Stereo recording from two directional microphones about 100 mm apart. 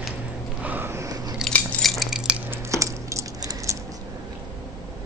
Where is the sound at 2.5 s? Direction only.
30° right (ahead or behind).